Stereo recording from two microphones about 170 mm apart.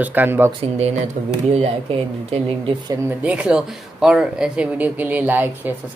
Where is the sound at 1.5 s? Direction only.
35° right (ahead or behind).